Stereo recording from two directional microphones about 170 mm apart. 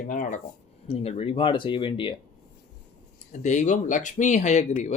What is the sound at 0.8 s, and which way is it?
Speech, 35° left (ahead or behind).